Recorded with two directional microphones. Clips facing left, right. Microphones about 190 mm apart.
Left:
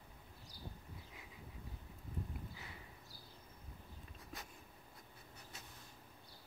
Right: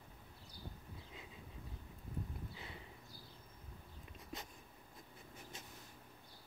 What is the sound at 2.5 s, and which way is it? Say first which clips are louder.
Horse: right 2 dB; 25° right (ahead or behind).